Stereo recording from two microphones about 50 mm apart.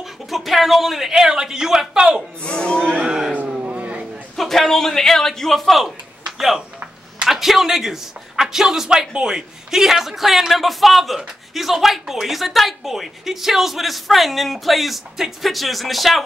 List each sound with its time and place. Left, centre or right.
0.0 s speech: centre
2.4 s speech: left
3.1 s a sound: centre
3.6 s vehicle: right
4.4 s a man's voice: centre